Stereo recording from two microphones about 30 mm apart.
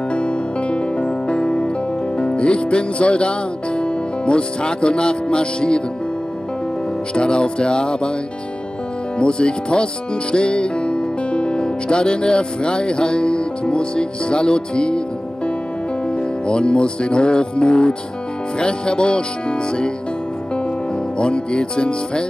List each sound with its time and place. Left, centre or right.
0.1 s music: left
7.2 s music: left
9.2 s music: left
16.1 s music: left
21.2 s music: left